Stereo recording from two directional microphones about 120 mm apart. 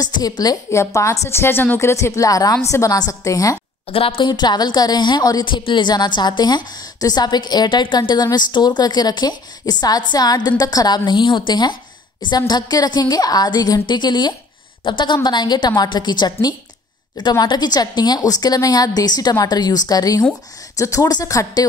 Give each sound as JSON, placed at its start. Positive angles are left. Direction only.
{"t": 0.0, "sound": "a woman's voice", "side_deg": 35}
{"t": 3.9, "sound": "a woman's voice", "side_deg": 50}